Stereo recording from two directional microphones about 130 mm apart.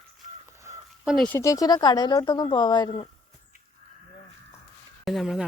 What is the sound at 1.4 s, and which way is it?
Speech, 25° left (ahead or behind).